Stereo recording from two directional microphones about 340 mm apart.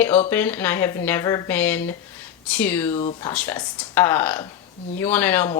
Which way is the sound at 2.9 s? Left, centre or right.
Centre.